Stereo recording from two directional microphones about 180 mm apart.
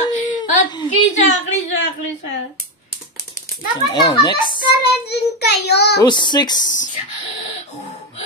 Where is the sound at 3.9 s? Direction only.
25° left (ahead or behind).